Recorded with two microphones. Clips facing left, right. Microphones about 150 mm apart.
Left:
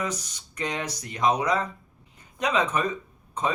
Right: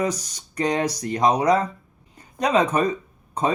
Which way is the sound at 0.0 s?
35° right (ahead or behind).